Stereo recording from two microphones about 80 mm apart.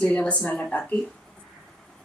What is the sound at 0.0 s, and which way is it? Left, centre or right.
Speech, centre.